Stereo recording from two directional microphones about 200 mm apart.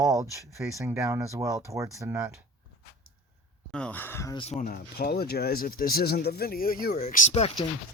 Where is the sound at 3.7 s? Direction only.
5° left (ahead or behind).